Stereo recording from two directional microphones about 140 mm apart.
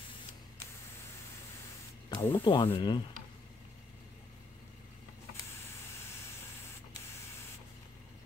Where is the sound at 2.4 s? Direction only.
35° left (ahead or behind).